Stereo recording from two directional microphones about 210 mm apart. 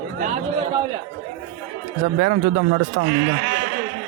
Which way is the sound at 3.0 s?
55° right (ahead or behind).